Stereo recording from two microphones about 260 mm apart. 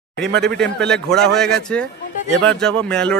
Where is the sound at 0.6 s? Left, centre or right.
Centre.